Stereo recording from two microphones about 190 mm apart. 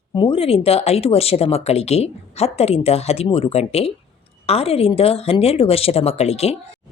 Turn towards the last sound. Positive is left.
turn(degrees=35)  # may be behind; listen again after turning